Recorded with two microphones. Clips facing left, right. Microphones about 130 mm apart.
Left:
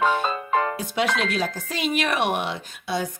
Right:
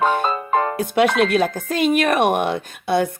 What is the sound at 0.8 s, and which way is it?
Speech, 55° right (ahead or behind).